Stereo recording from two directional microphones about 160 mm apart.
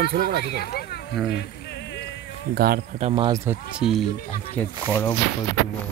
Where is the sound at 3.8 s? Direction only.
Centre (ahead or behind).